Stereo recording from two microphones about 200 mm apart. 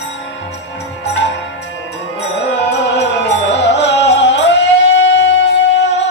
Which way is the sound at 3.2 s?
60° left (ahead or behind).